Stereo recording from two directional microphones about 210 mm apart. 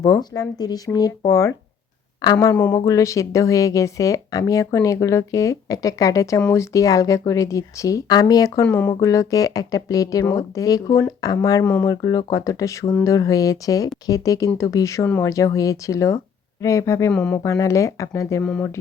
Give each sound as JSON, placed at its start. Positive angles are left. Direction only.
{"t": 0.0, "sound": "speech", "side_deg": 20}